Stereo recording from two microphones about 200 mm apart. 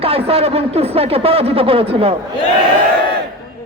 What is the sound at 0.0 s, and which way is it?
Speech, 30° right (ahead or behind).